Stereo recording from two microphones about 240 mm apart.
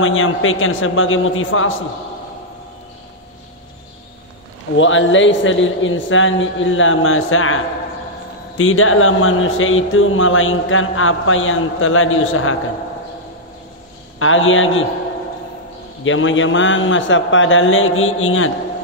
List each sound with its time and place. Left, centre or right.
0.0 s speech: left
4.7 s a man's voice: left
8.5 s speech: left
14.2 s speech: left
16.0 s a man's voice: left